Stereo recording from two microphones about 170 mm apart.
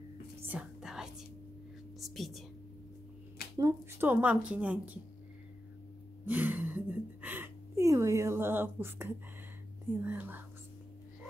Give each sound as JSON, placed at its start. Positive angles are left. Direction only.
{"t": 0.5, "sound": "whispering", "side_deg": -5}
{"t": 2.0, "sound": "speech", "side_deg": 0}
{"t": 3.5, "sound": "speech", "side_deg": -20}
{"t": 4.1, "sound": "a woman's voice", "side_deg": -10}
{"t": 6.2, "sound": "a sound", "side_deg": -10}
{"t": 10.0, "sound": "a woman's voice", "side_deg": -10}